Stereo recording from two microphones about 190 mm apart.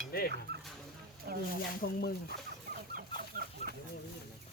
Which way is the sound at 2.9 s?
50° right (ahead or behind).